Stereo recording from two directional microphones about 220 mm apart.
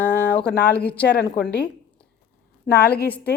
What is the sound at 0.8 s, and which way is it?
Speech, 5° left (ahead or behind).